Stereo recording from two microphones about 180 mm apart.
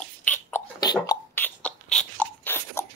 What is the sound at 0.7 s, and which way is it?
Cough, 20° left (ahead or behind).